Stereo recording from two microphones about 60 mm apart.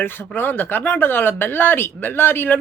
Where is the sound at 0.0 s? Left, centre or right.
Left.